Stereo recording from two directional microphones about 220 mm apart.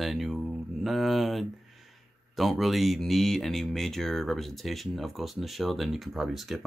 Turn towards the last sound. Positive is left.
turn(degrees=0)  # may be behind; listen again after turning